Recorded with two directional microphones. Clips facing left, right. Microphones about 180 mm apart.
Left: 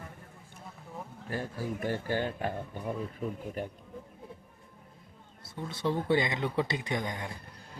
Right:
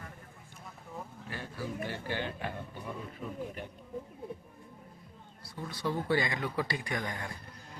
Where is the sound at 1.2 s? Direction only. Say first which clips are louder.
Left 6 dB; 45° left (ahead or behind).